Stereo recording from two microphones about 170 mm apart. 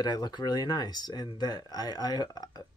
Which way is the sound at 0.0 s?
25° left (ahead or behind).